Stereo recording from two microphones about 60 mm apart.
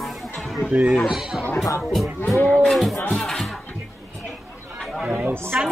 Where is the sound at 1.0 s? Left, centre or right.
Centre.